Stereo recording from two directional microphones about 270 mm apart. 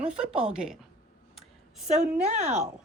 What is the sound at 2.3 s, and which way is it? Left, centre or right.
Speech, right.